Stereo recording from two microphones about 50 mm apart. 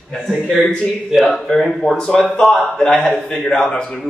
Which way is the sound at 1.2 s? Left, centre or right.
Centre.